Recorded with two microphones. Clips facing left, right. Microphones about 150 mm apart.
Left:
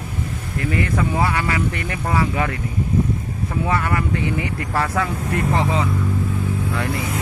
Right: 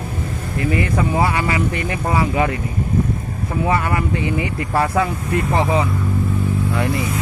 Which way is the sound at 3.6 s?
15° right (ahead or behind).